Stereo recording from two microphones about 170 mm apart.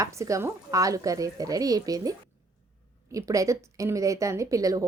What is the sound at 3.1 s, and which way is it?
Speech, 20° right (ahead or behind).